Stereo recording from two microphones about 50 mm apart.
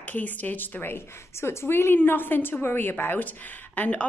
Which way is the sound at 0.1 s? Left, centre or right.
Left.